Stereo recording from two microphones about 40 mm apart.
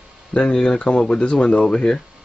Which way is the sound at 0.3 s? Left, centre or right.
Left.